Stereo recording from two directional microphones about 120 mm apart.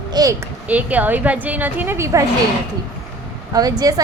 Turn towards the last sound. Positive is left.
turn(degrees=-35)  # may be behind; listen again after turning